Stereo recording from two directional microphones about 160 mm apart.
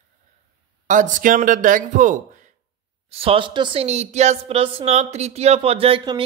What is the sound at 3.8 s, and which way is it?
Speech, 45° right (ahead or behind).